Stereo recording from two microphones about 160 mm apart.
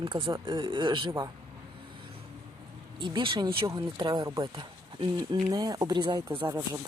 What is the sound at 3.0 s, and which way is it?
Speech, 30° right (ahead or behind).